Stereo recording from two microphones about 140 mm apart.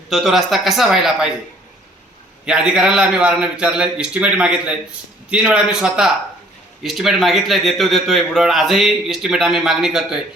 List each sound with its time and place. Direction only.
0.1 s a man's voice: centre (ahead or behind)
2.5 s a man's voice: 5° right (ahead or behind)